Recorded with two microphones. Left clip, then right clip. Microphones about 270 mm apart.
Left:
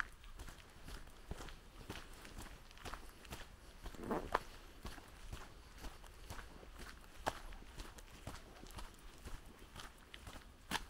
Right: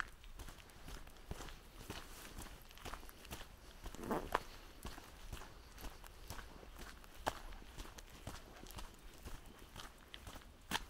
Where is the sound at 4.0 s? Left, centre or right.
Right.